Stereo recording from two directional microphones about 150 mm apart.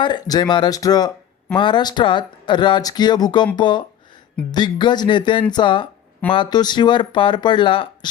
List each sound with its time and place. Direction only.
0.0 s speech: 30° left (ahead or behind)